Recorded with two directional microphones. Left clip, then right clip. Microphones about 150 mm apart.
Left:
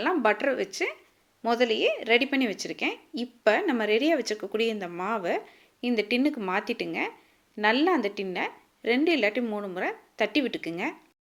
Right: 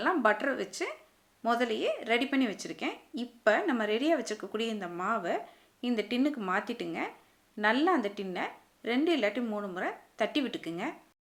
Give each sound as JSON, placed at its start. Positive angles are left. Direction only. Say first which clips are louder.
{"t": 0.0, "sound": "a woman's voice", "louder": "left 3 dB", "side_deg": 20}